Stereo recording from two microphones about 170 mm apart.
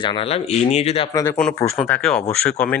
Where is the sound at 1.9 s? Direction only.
5° left (ahead or behind).